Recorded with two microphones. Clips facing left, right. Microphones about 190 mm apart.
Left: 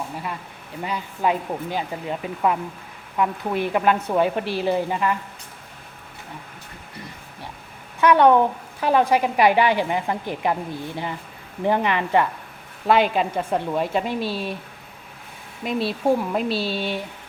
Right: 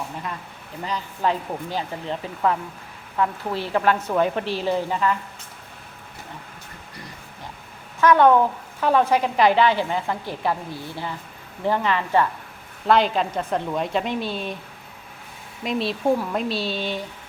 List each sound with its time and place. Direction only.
0.9 s a woman's voice: 10° left (ahead or behind)
8.0 s a woman's voice: 15° left (ahead or behind)
15.6 s speech: 5° left (ahead or behind)